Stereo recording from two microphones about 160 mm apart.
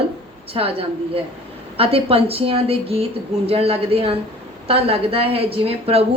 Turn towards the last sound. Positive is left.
turn(degrees=-35)  # may be behind; listen again after turning